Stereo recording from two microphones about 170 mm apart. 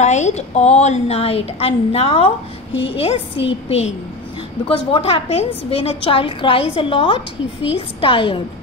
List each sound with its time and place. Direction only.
0.0 s a woman's voice: 45° left (ahead or behind)